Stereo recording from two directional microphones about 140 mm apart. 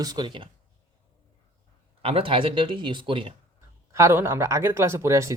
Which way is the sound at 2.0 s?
40° right (ahead or behind).